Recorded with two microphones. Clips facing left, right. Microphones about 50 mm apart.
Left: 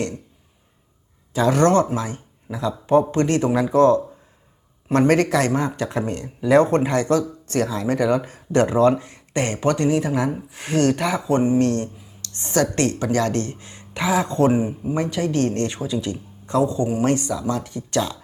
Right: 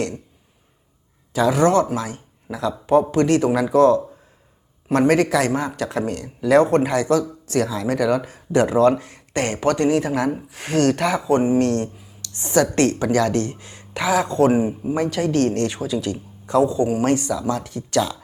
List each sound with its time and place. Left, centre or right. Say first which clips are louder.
1.4 s speech: even; centre
2.0 s speech: even; centre
5.7 s speech: right 1 dB; centre
6.6 s speech: right 2 dB; centre
12.3 s speech: right 2 dB; centre
13.0 s speech: right 2 dB; centre
14.3 s speech: right 2 dB; centre
14.9 s speech: right 2 dB; centre
16.0 s speech: right 2 dB; centre
16.6 s speech: right 2 dB; centre
17.0 s speech: right 1 dB; centre